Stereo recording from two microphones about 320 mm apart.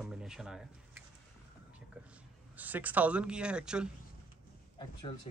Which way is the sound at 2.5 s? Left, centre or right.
Centre.